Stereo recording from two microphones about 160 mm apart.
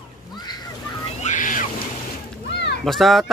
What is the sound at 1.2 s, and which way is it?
Ocean, 55° left (ahead or behind).